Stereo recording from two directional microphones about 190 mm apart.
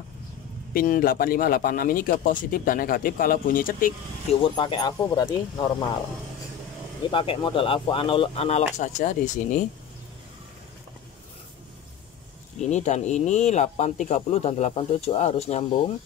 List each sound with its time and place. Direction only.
0.7 s speech: 50° left (ahead or behind)
4.3 s speech: 25° left (ahead or behind)
7.1 s speech: 25° left (ahead or behind)
12.5 s speech: 35° left (ahead or behind)